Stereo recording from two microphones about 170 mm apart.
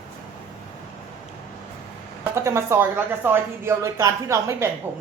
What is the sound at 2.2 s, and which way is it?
Speech, 15° right (ahead or behind).